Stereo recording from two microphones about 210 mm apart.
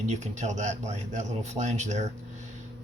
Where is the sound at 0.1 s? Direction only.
35° right (ahead or behind).